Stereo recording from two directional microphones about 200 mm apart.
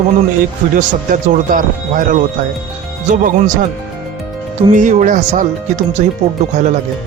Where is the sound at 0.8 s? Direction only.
40° right (ahead or behind).